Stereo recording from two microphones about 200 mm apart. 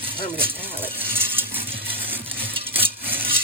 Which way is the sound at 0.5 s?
10° right (ahead or behind).